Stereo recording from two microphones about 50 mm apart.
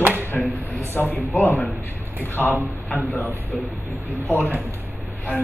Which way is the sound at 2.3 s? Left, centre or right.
Left.